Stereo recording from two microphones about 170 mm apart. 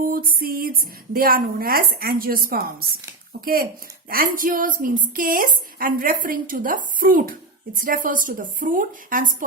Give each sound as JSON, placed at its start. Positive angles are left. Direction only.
{"t": 0.0, "sound": "a woman's voice", "side_deg": -55}